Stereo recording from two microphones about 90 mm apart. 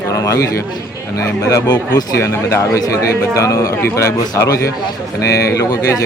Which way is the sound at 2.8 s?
35° left (ahead or behind).